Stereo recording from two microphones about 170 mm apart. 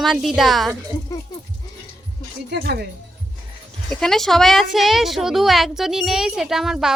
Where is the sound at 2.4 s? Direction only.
70° right (ahead or behind).